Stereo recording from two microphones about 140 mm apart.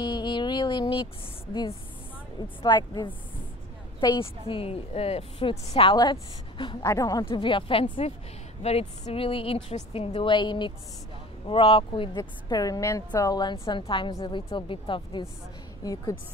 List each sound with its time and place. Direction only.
0.0 s a sound: 35° left (ahead or behind)
2.6 s a woman's voice: 30° left (ahead or behind)
5.9 s a woman's voice: 30° left (ahead or behind)
7.2 s a woman's voice: 35° left (ahead or behind)
15.8 s a woman's voice: 25° left (ahead or behind)